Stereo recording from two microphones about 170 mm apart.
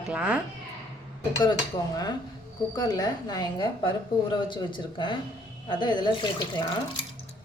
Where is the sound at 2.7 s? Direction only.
25° left (ahead or behind).